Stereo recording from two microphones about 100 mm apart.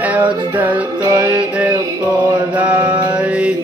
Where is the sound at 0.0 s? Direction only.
15° right (ahead or behind).